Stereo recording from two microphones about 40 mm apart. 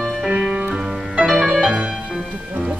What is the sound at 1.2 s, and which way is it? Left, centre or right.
Music, centre.